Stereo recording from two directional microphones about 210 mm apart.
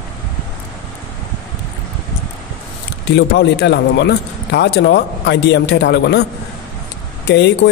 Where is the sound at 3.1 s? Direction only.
55° left (ahead or behind).